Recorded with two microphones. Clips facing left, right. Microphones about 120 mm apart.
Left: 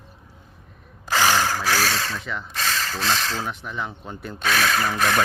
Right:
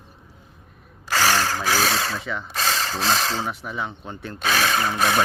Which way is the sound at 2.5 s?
30° right (ahead or behind).